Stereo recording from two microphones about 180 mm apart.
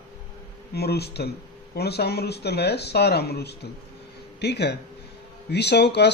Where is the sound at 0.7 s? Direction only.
65° left (ahead or behind).